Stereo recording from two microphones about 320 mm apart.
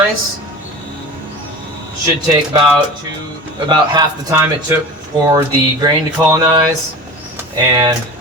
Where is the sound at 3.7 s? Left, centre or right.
Centre.